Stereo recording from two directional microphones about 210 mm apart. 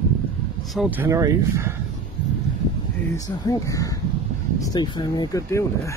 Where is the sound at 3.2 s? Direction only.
15° left (ahead or behind).